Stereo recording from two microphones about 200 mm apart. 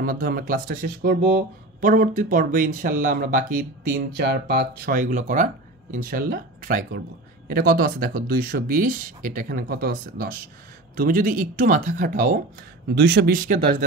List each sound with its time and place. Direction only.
0.0 s speech: 45° right (ahead or behind)
12.9 s speech: 55° right (ahead or behind)